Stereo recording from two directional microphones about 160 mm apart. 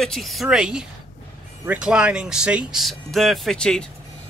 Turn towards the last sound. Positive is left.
turn(degrees=5)  # may be behind; listen again after turning